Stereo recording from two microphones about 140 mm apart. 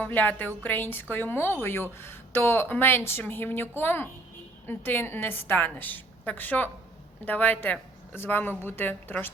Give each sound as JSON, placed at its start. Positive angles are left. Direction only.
{"t": 0.0, "sound": "speech", "side_deg": 10}